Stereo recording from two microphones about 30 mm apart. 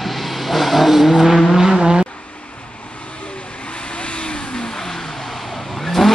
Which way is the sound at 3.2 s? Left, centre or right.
Left.